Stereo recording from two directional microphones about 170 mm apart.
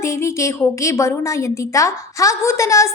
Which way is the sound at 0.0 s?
15° left (ahead or behind).